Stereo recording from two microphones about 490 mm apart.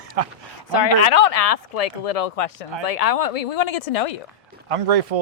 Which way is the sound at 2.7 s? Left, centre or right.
Right.